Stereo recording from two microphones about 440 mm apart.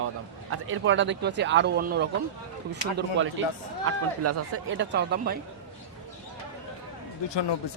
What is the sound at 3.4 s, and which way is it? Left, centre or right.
Speech, right.